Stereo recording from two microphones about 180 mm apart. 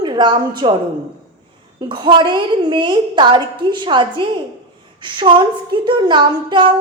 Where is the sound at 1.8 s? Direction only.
25° right (ahead or behind).